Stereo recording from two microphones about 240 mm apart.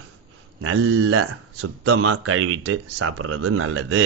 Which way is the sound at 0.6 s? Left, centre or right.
Right.